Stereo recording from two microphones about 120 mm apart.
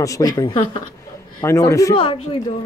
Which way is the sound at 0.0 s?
30° left (ahead or behind).